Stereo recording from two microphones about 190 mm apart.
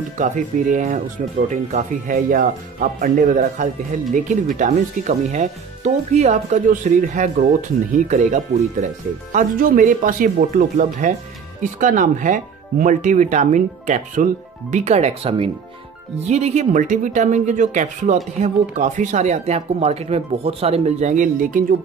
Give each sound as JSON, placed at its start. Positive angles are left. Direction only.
{"t": 0.2, "sound": "speech", "side_deg": -40}